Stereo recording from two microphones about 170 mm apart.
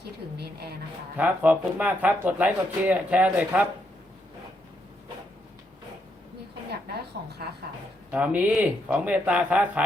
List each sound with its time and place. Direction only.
0.0 s speech: 70° right (ahead or behind)
1.1 s speech: 10° right (ahead or behind)
7.1 s a sound: 75° right (ahead or behind)
8.1 s speech: 10° right (ahead or behind)